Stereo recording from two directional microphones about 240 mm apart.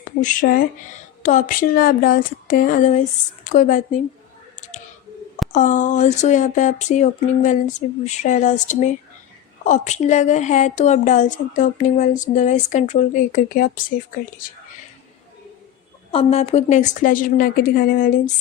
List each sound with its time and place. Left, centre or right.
0.0 s a woman's voice: left
5.5 s a woman's voice: left
16.1 s a woman's voice: left